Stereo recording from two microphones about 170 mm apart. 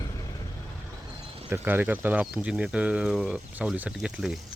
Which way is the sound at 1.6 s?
10° right (ahead or behind).